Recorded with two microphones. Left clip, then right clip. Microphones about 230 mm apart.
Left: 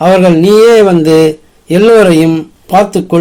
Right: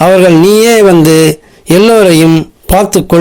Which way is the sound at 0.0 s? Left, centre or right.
Right.